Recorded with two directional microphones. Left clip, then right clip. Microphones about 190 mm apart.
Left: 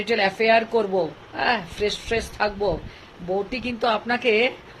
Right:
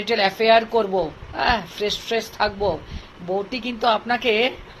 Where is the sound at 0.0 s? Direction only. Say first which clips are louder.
Right 1 dB; 5° left (ahead or behind).